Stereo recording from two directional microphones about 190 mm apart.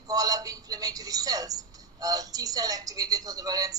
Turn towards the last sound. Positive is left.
turn(degrees=-20)  # may be behind; listen again after turning